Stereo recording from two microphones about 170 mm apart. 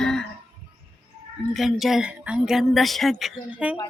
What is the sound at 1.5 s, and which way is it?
A woman's voice, centre (ahead or behind).